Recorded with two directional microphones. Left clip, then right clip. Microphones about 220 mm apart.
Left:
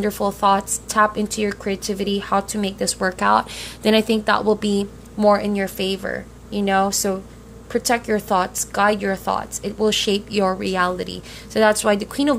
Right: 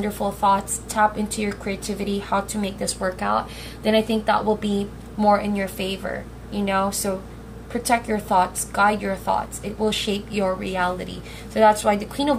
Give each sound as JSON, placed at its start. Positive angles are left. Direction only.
{"t": 0.0, "sound": "a woman's voice", "side_deg": 50}